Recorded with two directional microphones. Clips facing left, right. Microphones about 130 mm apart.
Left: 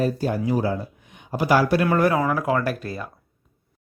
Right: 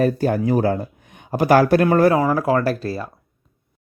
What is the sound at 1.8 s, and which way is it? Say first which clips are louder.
Speech: right 4 dB; 35° right (ahead or behind).